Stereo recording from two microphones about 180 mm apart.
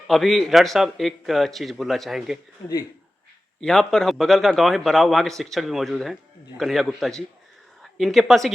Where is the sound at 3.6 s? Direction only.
5° left (ahead or behind).